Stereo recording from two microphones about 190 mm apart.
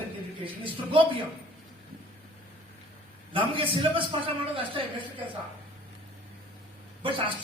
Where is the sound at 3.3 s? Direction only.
25° right (ahead or behind).